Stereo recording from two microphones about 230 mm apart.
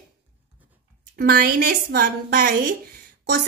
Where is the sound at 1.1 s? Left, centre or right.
Right.